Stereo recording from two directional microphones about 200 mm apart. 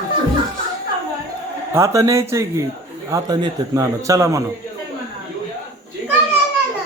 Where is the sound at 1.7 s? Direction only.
15° right (ahead or behind).